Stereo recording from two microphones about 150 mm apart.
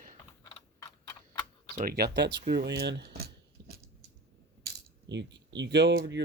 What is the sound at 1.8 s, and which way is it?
Speech, 90° right.